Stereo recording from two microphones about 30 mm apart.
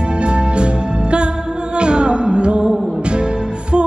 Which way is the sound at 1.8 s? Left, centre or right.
Right.